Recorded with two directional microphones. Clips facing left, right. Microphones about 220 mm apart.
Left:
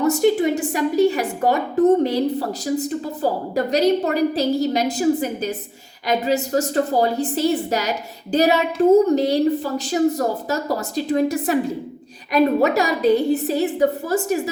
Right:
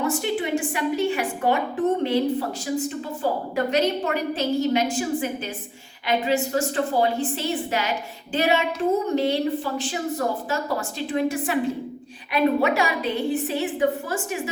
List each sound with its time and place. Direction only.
0.0 s a woman's voice: 40° left (ahead or behind)